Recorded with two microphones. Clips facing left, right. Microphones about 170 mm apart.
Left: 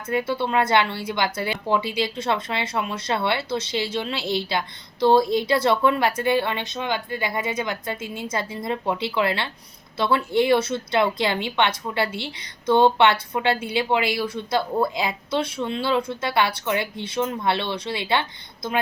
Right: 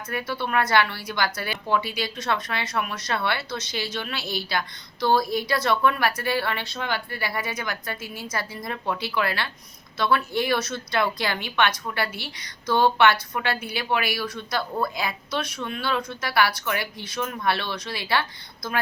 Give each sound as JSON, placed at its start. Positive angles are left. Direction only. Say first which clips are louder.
{"t": 0.1, "sound": "speech", "louder": "left 4 dB", "side_deg": 25}